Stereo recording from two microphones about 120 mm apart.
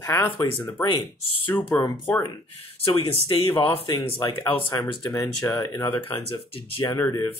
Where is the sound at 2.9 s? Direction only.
40° left (ahead or behind).